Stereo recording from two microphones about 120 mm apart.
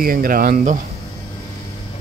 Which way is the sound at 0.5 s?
90° right.